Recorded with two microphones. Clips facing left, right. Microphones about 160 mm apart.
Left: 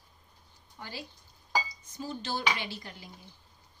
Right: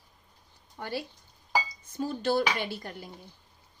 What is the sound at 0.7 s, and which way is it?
Speech, 60° right (ahead or behind).